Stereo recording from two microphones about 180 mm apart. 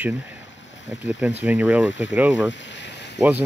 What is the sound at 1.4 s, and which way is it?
Speech, 10° right (ahead or behind).